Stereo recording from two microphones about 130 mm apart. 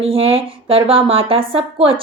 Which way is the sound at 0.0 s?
45° right (ahead or behind).